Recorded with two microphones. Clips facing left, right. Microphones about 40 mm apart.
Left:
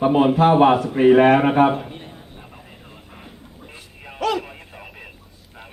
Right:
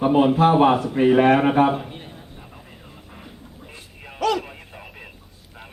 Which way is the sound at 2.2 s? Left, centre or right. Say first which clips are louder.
Left 1 dB; centre.